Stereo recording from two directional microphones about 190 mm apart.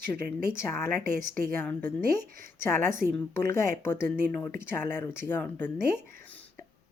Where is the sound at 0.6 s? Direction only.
10° left (ahead or behind).